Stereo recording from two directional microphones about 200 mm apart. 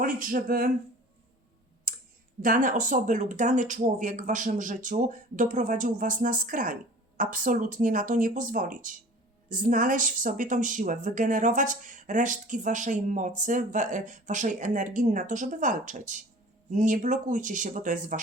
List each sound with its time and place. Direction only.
0.0 s speech: 45° right (ahead or behind)
1.9 s a sound: 45° right (ahead or behind)
2.4 s speech: 40° right (ahead or behind)